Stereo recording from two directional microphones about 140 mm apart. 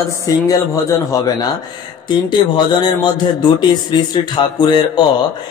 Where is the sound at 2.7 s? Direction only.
30° left (ahead or behind).